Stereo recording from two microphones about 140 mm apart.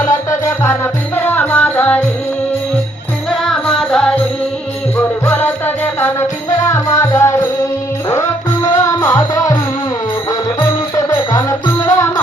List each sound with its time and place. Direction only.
0.0 s music: 20° left (ahead or behind)
3.2 s music: centre (ahead or behind); by 9.6 s 20° left (ahead or behind)
10.6 s music: 15° left (ahead or behind)